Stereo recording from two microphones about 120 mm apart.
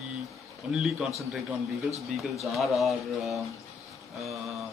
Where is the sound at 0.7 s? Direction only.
Centre (ahead or behind).